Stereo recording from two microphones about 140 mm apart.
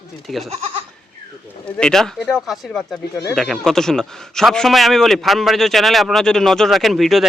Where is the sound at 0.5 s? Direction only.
45° right (ahead or behind).